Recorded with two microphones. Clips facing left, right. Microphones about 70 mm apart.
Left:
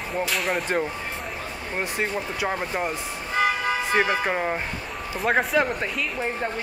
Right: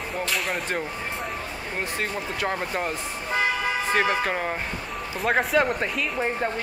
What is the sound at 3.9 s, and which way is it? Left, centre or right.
A woman's voice, centre.